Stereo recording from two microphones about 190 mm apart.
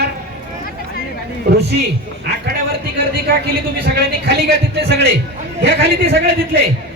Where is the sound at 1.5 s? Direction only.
60° right (ahead or behind).